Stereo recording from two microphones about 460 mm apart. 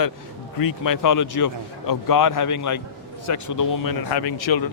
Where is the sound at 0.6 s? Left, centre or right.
Left.